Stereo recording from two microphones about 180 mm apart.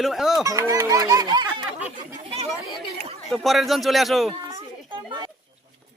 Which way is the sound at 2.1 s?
35° right (ahead or behind).